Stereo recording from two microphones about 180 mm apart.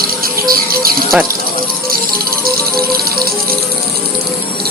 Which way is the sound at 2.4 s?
55° right (ahead or behind).